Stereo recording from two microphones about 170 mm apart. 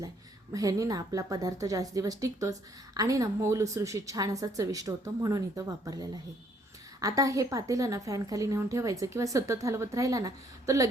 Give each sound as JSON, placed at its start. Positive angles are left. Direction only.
{"t": 0.5, "sound": "a woman's voice", "side_deg": -20}